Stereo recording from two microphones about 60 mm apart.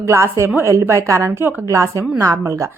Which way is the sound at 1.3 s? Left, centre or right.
Right.